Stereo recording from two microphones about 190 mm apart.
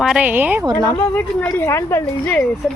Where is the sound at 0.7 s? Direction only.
20° right (ahead or behind).